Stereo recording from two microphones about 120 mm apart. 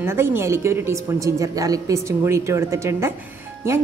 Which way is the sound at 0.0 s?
20° right (ahead or behind).